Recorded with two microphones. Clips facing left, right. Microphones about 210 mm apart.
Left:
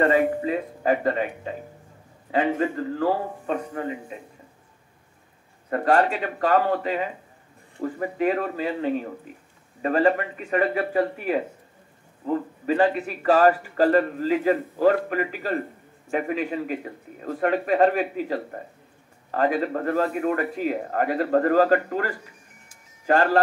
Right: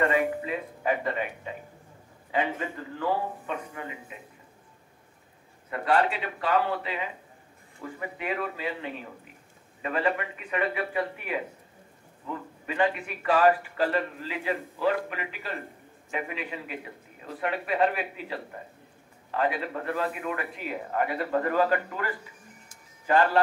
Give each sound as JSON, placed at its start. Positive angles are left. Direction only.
{"t": 0.0, "sound": "a man's voice", "side_deg": 35}
{"t": 5.7, "sound": "a man's voice", "side_deg": 45}